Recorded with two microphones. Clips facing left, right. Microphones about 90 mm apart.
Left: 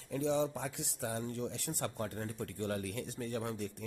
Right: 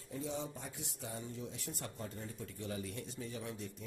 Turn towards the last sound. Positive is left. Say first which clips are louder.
# left 6 dB
turn(degrees=60)  # may be behind; listen again after turning